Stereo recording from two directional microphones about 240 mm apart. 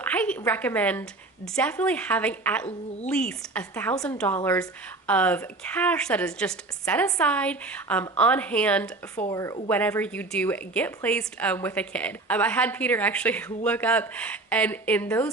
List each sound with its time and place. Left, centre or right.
0.0 s a woman's voice: centre